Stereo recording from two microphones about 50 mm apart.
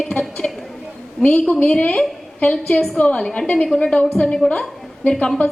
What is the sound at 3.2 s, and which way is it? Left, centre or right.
A woman's voice, centre.